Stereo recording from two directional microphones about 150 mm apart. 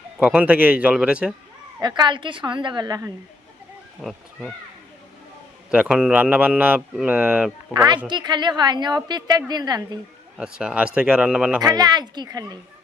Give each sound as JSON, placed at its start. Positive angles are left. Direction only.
{"t": 0.2, "sound": "speech", "side_deg": -10}
{"t": 1.8, "sound": "a woman's voice", "side_deg": -30}
{"t": 4.0, "sound": "speech", "side_deg": 0}
{"t": 5.7, "sound": "speech", "side_deg": -5}
{"t": 7.9, "sound": "a woman's voice", "side_deg": -30}
{"t": 10.3, "sound": "speech", "side_deg": -5}
{"t": 11.6, "sound": "a woman's voice", "side_deg": -25}